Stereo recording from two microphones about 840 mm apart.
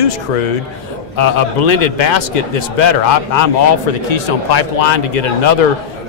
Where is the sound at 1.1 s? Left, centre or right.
Left.